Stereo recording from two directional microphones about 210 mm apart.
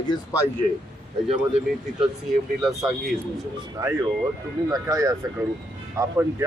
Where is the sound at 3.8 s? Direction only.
15° right (ahead or behind).